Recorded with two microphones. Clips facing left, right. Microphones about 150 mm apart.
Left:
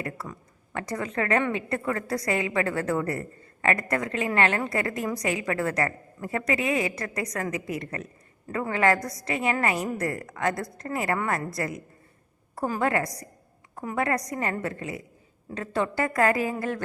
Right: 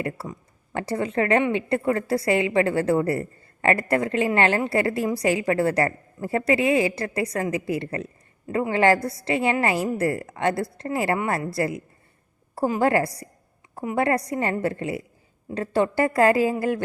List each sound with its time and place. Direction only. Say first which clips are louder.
0.0 s a woman's voice: right 5 dB; 30° right (ahead or behind)